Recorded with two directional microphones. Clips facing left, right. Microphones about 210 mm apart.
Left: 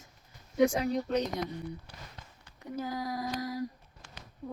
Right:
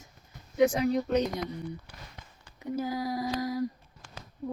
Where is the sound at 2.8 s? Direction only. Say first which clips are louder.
Right 3 dB; 5° right (ahead or behind).